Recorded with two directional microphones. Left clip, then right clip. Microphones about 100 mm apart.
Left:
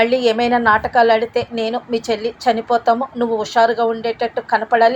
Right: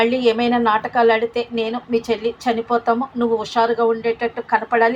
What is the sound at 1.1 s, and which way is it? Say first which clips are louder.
Speech: left 3 dB; 5° left (ahead or behind).